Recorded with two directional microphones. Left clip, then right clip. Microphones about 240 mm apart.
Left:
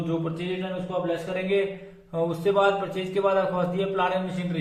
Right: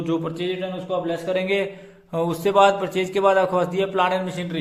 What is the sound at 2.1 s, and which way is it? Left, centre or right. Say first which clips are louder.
A man's voice: right 4 dB; right.